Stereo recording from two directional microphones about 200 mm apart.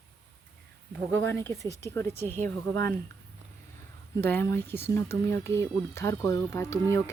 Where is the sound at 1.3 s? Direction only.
10° left (ahead or behind).